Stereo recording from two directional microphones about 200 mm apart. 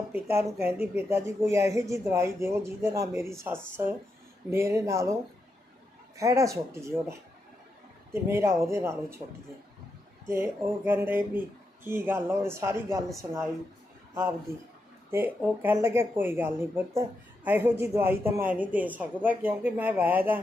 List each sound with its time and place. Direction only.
0.1 s speech: 10° right (ahead or behind)
6.1 s speech: 15° right (ahead or behind)
10.2 s speech: 10° right (ahead or behind)
15.1 s speech: 10° right (ahead or behind)